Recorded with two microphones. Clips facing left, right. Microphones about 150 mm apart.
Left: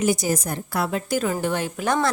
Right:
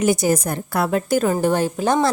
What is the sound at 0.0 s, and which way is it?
A woman's voice, 55° right (ahead or behind).